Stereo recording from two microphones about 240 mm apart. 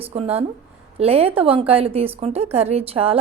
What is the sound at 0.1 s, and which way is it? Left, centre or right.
A woman's voice, right.